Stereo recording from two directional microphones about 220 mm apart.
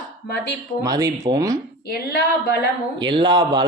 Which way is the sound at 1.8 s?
45° left (ahead or behind).